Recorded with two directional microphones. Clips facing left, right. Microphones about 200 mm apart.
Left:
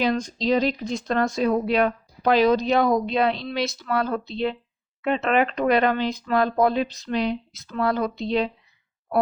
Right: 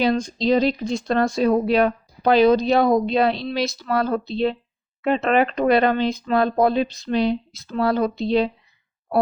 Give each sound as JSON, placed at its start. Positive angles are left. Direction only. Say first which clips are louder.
{"t": 0.0, "sound": "speech", "louder": "right 3 dB", "side_deg": -30}